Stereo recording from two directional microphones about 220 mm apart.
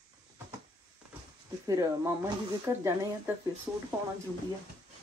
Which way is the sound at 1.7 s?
15° right (ahead or behind).